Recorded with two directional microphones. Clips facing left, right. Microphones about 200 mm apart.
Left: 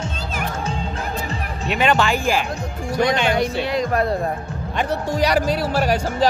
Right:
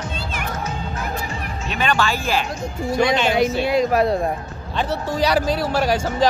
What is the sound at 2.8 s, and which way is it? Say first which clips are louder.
Speech: right 1 dB; 10° right (ahead or behind).